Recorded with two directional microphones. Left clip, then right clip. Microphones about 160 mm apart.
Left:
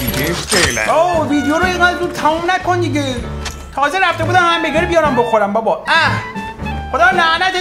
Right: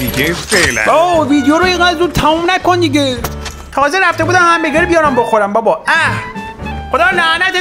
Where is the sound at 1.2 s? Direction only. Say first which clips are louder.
Right 4 dB; 50° right (ahead or behind).